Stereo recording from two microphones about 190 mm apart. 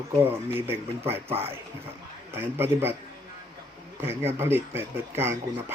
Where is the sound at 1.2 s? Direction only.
30° right (ahead or behind).